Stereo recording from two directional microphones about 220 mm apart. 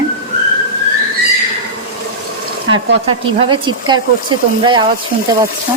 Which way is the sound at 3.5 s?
20° right (ahead or behind).